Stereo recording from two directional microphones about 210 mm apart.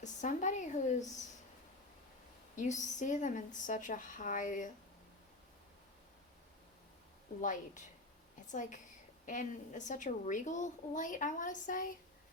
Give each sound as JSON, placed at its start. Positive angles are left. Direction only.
{"t": 0.0, "sound": "a woman's voice", "side_deg": 35}
{"t": 2.6, "sound": "a woman's voice", "side_deg": 35}
{"t": 7.4, "sound": "a woman's voice", "side_deg": 40}